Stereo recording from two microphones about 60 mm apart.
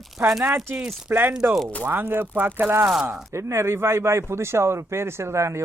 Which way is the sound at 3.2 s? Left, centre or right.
Right.